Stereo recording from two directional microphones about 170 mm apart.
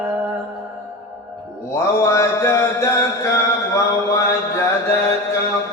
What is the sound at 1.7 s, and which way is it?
Mantra, 15° left (ahead or behind).